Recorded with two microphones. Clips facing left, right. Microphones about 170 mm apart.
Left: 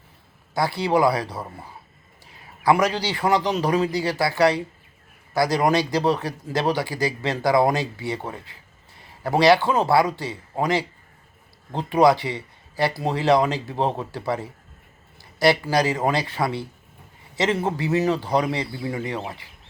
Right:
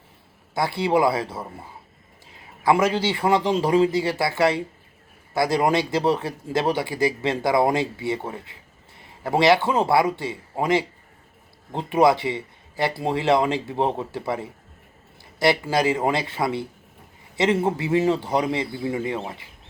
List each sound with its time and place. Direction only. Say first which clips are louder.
0.5 s speech: even; 25° right (ahead or behind)
9.0 s a sound: left 1 dB; 20° right (ahead or behind)
9.6 s speech: even; 25° right (ahead or behind)